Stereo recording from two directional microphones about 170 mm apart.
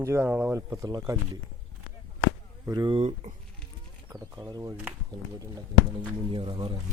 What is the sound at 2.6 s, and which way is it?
Speech, 20° right (ahead or behind).